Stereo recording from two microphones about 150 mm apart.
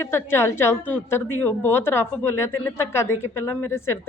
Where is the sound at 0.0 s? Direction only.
15° left (ahead or behind).